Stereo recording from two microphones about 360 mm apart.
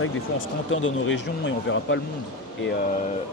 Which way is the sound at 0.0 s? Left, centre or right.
Left.